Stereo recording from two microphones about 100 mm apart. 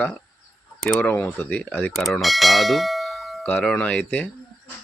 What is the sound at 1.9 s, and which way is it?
Speech, centre (ahead or behind).